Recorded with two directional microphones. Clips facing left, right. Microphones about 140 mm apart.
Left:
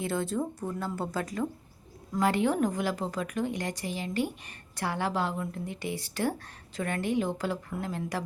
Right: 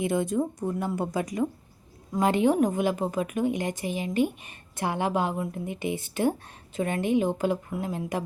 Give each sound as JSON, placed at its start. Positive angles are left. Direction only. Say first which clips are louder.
{"t": 0.0, "sound": "a woman's voice", "louder": "right 5 dB", "side_deg": -15}